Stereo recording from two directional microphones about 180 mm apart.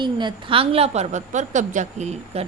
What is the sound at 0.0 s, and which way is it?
Speech, 25° right (ahead or behind).